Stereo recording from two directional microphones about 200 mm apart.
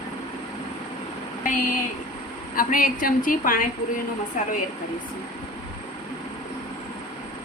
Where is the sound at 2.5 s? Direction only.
45° left (ahead or behind).